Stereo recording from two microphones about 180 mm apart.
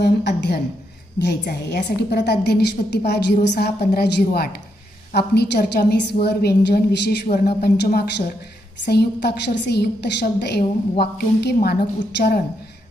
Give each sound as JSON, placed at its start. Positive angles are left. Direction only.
{"t": 0.0, "sound": "a woman's voice", "side_deg": 65}